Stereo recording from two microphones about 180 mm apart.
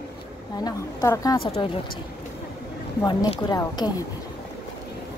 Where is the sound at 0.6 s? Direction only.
20° left (ahead or behind).